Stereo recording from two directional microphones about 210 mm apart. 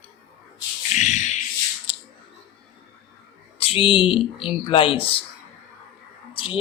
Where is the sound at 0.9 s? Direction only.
35° left (ahead or behind).